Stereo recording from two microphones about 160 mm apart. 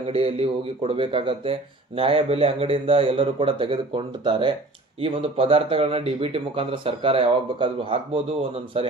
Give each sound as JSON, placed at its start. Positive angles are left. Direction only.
{"t": 0.1, "sound": "speech", "side_deg": -40}